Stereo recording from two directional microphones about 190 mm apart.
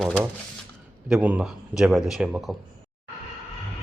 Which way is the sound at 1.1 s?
5° right (ahead or behind).